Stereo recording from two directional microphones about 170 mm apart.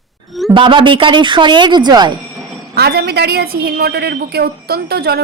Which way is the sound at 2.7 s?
65° right (ahead or behind).